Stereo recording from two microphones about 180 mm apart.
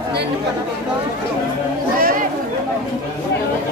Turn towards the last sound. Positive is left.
turn(degrees=-55)  # may be behind; listen again after turning